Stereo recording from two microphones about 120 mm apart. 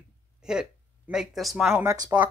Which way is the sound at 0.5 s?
5° right (ahead or behind).